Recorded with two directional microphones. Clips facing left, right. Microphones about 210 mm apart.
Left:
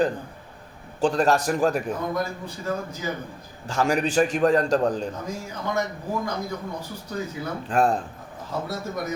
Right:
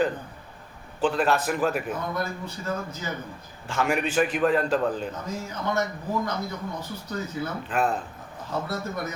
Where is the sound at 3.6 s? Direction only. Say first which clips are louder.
Left 3 dB; 35° left (ahead or behind).